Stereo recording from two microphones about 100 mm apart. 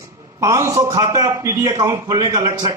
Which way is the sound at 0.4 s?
30° right (ahead or behind).